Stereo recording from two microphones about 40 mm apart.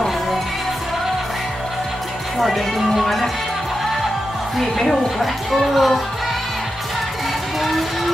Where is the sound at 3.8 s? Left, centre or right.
Centre.